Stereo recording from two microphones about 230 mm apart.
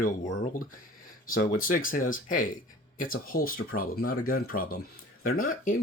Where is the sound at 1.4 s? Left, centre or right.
Left.